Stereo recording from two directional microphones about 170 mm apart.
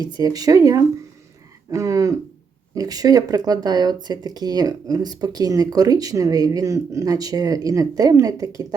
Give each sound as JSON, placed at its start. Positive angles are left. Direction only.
{"t": 0.2, "sound": "speech", "side_deg": -20}